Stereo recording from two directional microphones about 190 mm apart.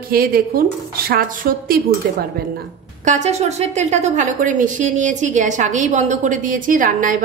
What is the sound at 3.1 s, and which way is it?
A woman's voice, 35° right (ahead or behind).